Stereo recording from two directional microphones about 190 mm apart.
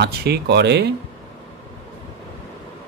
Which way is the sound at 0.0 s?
60° right (ahead or behind).